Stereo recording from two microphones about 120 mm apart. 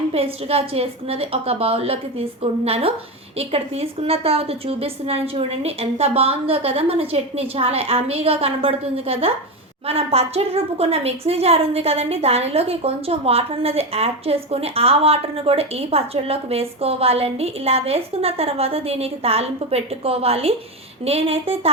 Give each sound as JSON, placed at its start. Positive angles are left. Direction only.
{"t": 0.1, "sound": "a woman's voice", "side_deg": -55}